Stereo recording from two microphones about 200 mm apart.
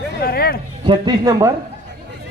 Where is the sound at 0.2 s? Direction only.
50° left (ahead or behind).